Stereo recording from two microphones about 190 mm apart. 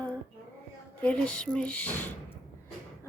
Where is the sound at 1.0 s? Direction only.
5° left (ahead or behind).